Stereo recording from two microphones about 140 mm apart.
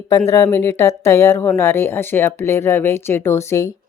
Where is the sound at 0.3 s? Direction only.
20° left (ahead or behind).